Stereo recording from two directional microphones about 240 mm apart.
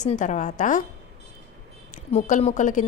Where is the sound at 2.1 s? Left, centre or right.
Left.